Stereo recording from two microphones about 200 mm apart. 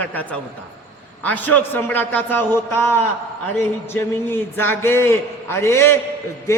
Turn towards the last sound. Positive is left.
turn(degrees=15)  # may be behind; listen again after turning